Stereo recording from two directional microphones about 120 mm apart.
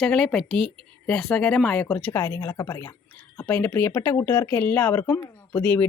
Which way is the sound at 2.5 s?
35° left (ahead or behind).